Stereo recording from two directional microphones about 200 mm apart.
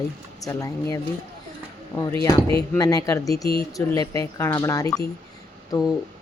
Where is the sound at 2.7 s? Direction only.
20° left (ahead or behind).